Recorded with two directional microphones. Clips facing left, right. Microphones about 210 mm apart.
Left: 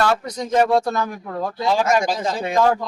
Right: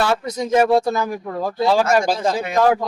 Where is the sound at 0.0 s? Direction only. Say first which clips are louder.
Right 1 dB; 10° right (ahead or behind).